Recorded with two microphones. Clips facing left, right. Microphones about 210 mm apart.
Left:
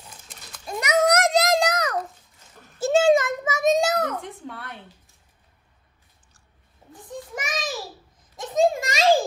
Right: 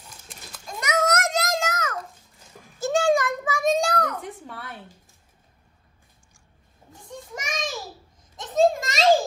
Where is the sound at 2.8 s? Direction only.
25° left (ahead or behind).